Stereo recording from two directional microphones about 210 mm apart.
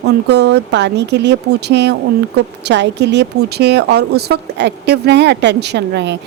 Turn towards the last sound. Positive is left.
turn(degrees=-55)  # may be behind; listen again after turning